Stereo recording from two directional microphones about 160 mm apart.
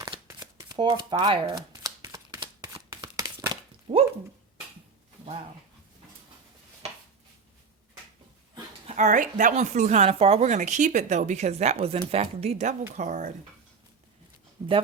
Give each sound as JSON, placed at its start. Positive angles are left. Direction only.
{"t": 0.3, "sound": "shuffling cards", "side_deg": -25}
{"t": 1.2, "sound": "crumpling", "side_deg": -30}
{"t": 2.4, "sound": "shuffling cards", "side_deg": -30}
{"t": 3.9, "sound": "speech", "side_deg": -45}
{"t": 8.9, "sound": "speech", "side_deg": -50}
{"t": 14.6, "sound": "speech", "side_deg": -25}